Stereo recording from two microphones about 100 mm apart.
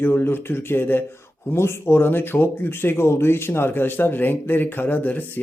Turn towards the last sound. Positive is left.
turn(degrees=15)  # may be behind; listen again after turning